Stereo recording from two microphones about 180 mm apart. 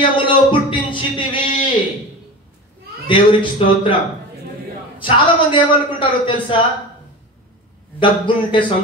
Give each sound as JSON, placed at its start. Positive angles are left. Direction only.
{"t": 0.0, "sound": "speech", "side_deg": 25}
{"t": 3.1, "sound": "a man's voice", "side_deg": 30}
{"t": 5.0, "sound": "a man's voice", "side_deg": 25}
{"t": 8.0, "sound": "a man's voice", "side_deg": 25}